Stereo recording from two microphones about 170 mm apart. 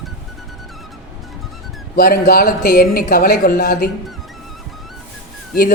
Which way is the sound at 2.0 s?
60° left (ahead or behind).